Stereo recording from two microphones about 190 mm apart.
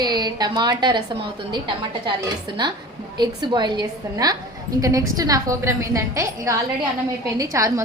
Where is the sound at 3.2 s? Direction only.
20° right (ahead or behind).